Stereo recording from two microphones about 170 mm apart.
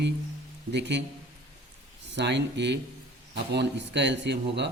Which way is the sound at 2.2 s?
90° right.